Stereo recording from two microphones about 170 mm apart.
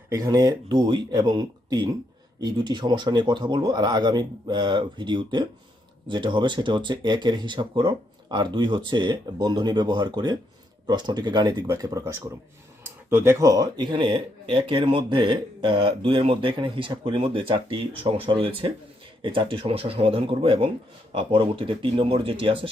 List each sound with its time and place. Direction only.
0.1 s speech: 20° right (ahead or behind)